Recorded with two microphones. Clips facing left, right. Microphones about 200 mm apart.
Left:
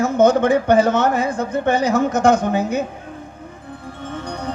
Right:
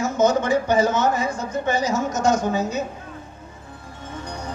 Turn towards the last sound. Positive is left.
turn(degrees=60)  # may be behind; listen again after turning